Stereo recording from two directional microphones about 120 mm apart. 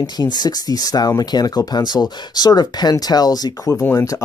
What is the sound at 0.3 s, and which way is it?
Speech, 35° left (ahead or behind).